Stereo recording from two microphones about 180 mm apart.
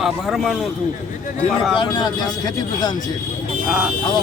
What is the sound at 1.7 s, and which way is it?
A man's voice, 25° left (ahead or behind).